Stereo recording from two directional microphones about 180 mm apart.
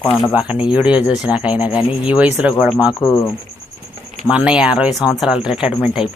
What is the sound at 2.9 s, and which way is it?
Speech, 20° left (ahead or behind).